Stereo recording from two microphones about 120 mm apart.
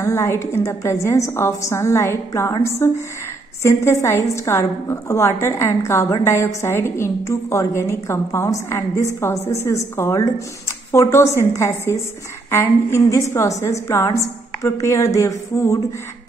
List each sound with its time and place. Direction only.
0.0 s a woman's voice: 25° left (ahead or behind)